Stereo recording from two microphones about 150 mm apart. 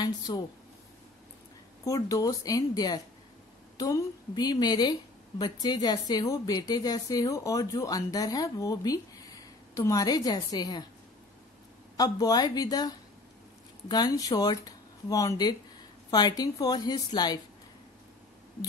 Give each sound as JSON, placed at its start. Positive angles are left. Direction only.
{"t": 0.3, "sound": "a woman's voice", "side_deg": 30}
{"t": 1.9, "sound": "a woman's voice", "side_deg": 20}
{"t": 12.0, "sound": "a woman's voice", "side_deg": 25}